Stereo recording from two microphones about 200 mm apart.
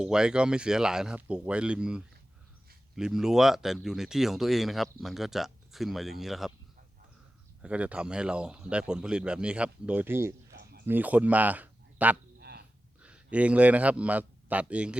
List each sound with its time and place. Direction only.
0.0 s speech: 5° right (ahead or behind)
7.6 s speech: 5° right (ahead or behind)
10.5 s a sound: 55° right (ahead or behind)
10.8 s speech: 10° right (ahead or behind)
12.4 s a sound: 55° right (ahead or behind)
13.0 s a man's voice: 5° right (ahead or behind)